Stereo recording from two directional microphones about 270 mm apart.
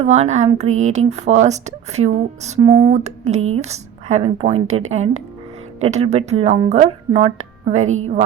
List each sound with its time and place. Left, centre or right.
0.0 s speech: right